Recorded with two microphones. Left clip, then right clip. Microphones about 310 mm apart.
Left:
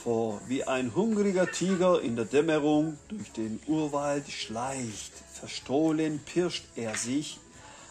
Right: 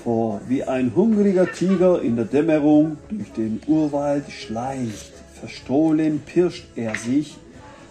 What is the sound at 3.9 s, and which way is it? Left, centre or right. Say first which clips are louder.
Speech: right 7 dB; left.